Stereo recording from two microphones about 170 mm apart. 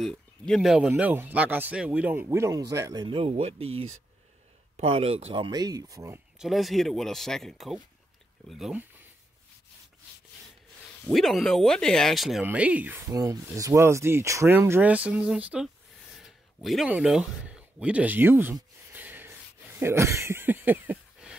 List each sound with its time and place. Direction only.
0.0 s speech: 5° left (ahead or behind); by 3.6 s 40° right (ahead or behind)
4.7 s speech: 35° right (ahead or behind); by 6.2 s 15° right (ahead or behind)
6.3 s speech: centre (ahead or behind)
11.1 s speech: centre (ahead or behind)
16.2 s a sound: centre (ahead or behind)
19.8 s speech: 15° right (ahead or behind)